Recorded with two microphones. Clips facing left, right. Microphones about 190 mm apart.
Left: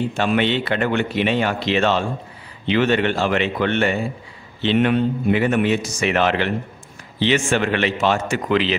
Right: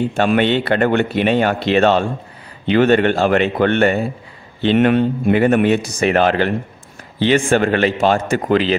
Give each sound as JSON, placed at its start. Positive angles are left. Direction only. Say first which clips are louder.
{"t": 0.1, "sound": "a man's voice", "louder": "right 4 dB", "side_deg": -55}
{"t": 5.9, "sound": "a man's voice", "louder": "right 4 dB", "side_deg": -40}